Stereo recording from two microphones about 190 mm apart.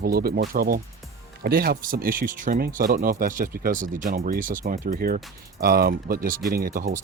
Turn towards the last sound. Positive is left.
turn(degrees=-45)  # may be behind; listen again after turning